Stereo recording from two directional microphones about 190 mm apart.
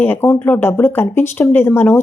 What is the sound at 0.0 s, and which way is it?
A woman's voice, 10° left (ahead or behind).